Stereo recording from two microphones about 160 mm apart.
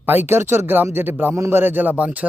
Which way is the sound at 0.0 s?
10° right (ahead or behind).